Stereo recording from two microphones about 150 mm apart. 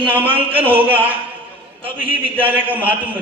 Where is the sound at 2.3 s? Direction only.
35° right (ahead or behind).